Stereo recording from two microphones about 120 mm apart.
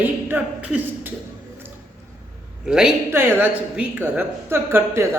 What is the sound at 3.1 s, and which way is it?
A woman's voice, 20° right (ahead or behind).